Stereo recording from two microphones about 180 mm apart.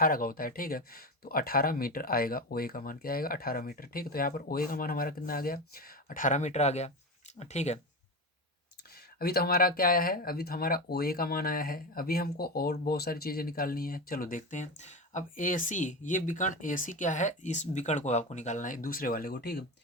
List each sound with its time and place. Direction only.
0.0 s speech: 55° left (ahead or behind)
9.1 s speech: 60° left (ahead or behind)